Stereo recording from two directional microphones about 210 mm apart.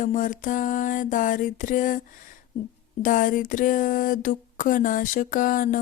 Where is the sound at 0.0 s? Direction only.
40° left (ahead or behind).